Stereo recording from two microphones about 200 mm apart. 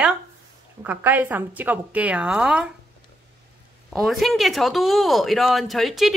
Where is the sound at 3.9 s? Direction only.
Centre (ahead or behind).